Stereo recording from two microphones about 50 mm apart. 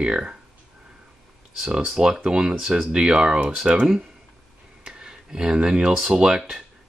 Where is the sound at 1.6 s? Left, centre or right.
Centre.